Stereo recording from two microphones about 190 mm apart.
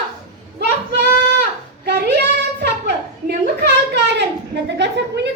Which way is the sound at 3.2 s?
60° right (ahead or behind).